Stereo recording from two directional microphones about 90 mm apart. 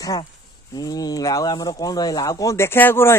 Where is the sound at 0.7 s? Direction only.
45° left (ahead or behind).